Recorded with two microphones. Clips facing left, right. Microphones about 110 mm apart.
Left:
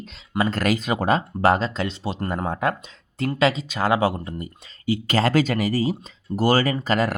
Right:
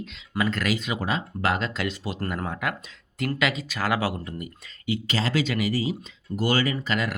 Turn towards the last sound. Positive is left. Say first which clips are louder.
# left 5 dB
turn(degrees=40)  # may be behind; listen again after turning